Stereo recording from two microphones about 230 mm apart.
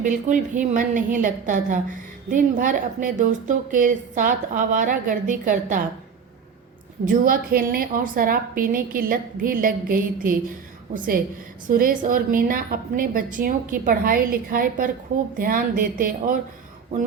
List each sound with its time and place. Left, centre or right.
0.0 s a woman's voice: right
7.1 s a woman's voice: right